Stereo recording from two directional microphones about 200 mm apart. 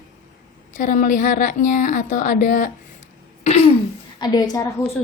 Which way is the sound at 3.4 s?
30° left (ahead or behind).